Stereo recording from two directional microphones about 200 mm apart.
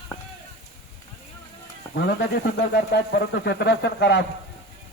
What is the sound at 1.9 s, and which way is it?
Speech, 55° left (ahead or behind).